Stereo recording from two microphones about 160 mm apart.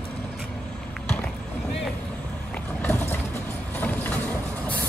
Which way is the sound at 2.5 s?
15° left (ahead or behind).